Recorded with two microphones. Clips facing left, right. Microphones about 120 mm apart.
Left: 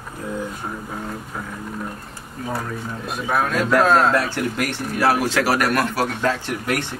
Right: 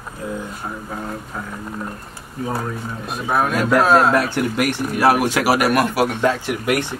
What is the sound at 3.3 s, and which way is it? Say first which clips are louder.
Speech: right 2 dB; 15° right (ahead or behind).